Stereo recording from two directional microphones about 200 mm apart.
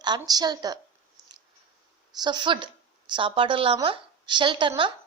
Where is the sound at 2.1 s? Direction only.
20° right (ahead or behind).